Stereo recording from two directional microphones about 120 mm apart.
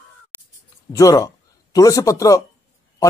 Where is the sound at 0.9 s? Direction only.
30° left (ahead or behind).